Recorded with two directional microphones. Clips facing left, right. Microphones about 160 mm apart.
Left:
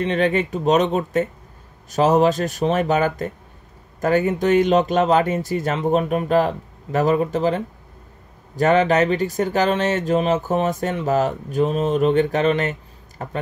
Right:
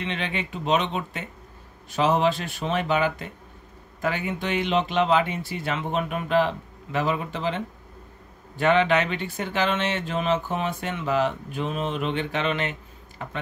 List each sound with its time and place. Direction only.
0.0 s speech: 45° left (ahead or behind)